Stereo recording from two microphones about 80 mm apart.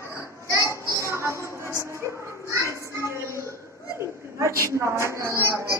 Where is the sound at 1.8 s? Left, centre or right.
Right.